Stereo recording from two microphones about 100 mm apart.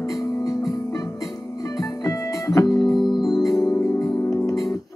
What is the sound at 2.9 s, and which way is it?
Organ, centre (ahead or behind).